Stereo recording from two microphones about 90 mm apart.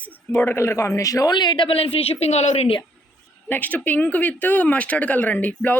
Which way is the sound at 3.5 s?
20° left (ahead or behind).